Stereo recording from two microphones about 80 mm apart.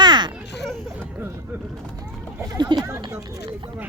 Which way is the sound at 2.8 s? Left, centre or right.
Right.